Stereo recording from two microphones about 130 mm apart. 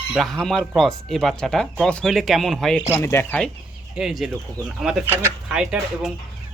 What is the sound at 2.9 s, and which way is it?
Speech, 20° left (ahead or behind).